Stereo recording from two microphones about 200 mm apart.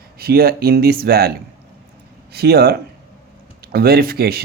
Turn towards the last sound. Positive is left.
turn(degrees=-50)  # may be behind; listen again after turning